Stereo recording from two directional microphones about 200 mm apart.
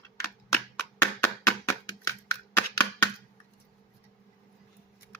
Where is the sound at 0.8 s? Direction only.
10° left (ahead or behind).